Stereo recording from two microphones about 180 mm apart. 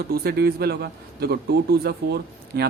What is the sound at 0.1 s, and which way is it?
A man's voice, 60° right (ahead or behind).